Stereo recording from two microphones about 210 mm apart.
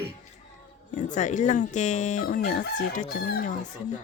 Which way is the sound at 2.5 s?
45° left (ahead or behind).